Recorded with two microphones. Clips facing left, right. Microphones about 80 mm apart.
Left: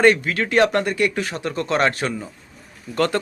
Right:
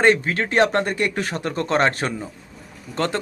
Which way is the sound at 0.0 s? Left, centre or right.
Right.